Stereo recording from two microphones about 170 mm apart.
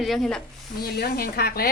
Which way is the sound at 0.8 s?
65° left (ahead or behind).